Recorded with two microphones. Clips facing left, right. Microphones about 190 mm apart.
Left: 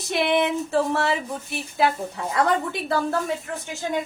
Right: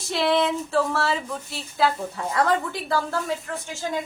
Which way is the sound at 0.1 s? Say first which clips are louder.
Even; 20° left (ahead or behind).